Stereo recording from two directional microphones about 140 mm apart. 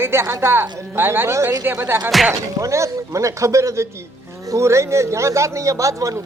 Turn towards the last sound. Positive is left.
turn(degrees=-20)  # may be behind; listen again after turning